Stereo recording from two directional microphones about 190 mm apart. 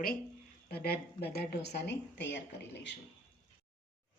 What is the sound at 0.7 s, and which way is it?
A woman's voice, 55° left (ahead or behind).